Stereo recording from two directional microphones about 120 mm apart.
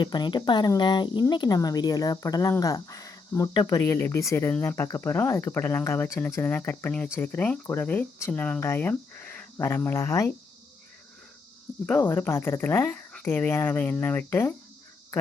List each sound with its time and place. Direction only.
0.0 s speech: 40° left (ahead or behind)
1.3 s cricket: 35° left (ahead or behind)
4.6 s speech: 20° left (ahead or behind)
11.9 s speech: 15° left (ahead or behind)